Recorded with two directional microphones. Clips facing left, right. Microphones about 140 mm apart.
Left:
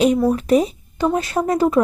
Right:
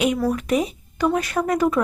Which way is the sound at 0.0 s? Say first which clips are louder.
Left 5 dB; 30° left (ahead or behind).